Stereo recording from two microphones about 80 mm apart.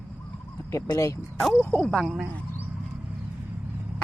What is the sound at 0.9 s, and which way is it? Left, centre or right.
Speech, left.